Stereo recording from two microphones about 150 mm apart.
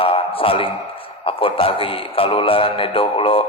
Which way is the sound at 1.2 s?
35° left (ahead or behind).